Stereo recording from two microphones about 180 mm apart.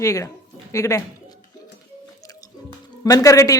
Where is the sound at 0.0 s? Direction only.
15° left (ahead or behind).